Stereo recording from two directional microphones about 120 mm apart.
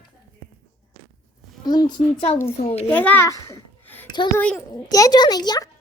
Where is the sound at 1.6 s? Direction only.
35° left (ahead or behind).